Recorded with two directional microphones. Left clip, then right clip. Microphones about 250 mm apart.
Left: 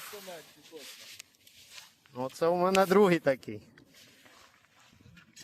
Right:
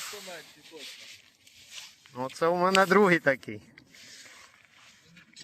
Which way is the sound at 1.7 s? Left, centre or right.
Centre.